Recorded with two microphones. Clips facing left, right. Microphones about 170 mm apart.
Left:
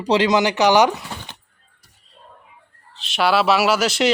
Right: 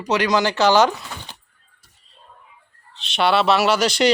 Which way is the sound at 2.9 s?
Centre (ahead or behind).